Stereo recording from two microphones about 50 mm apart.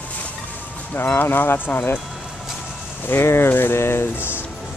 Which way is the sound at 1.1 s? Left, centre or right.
Left.